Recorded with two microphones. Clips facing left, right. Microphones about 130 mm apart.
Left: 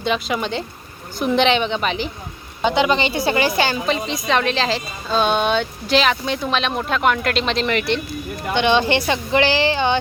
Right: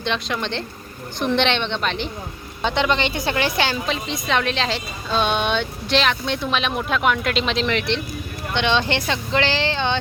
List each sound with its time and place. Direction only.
0.0 s a woman's voice: 5° left (ahead or behind)